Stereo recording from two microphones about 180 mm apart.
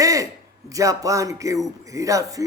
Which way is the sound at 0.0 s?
20° right (ahead or behind).